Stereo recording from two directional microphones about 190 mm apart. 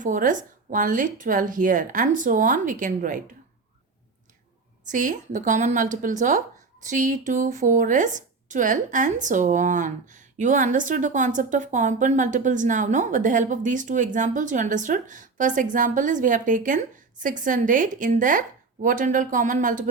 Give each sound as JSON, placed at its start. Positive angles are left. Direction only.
{"t": 0.0, "sound": "a woman's voice", "side_deg": -45}
{"t": 4.9, "sound": "a woman's voice", "side_deg": -45}